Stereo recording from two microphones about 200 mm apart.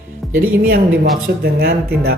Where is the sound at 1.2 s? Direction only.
55° right (ahead or behind).